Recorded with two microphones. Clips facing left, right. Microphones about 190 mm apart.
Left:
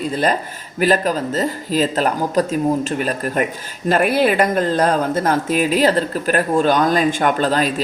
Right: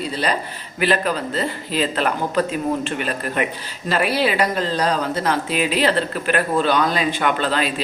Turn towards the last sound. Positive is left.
turn(degrees=40)  # may be behind; listen again after turning